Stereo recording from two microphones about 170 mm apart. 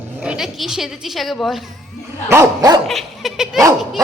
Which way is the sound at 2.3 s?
20° right (ahead or behind).